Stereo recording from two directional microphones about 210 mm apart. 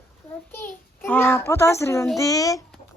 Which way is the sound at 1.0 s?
10° left (ahead or behind).